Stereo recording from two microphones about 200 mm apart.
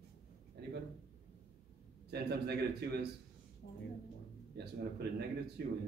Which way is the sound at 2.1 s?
55° right (ahead or behind).